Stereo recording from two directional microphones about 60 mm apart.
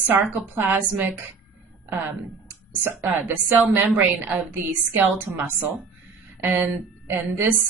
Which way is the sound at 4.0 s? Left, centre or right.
Right.